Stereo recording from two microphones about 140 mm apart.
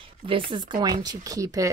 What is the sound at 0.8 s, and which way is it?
Speech, 30° right (ahead or behind).